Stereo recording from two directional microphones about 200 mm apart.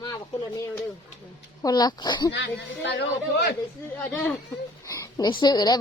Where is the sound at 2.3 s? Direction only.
60° left (ahead or behind).